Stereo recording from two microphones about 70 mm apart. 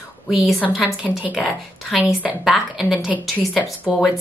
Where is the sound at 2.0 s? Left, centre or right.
Right.